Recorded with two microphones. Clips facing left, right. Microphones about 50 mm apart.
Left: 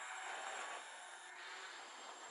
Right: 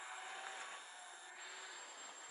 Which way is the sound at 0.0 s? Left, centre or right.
Centre.